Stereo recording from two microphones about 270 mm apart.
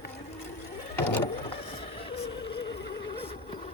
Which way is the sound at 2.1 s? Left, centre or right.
Centre.